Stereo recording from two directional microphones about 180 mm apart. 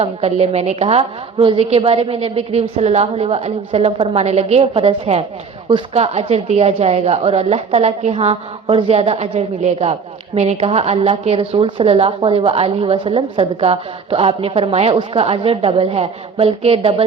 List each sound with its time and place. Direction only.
0.0 s a woman's voice: 35° right (ahead or behind)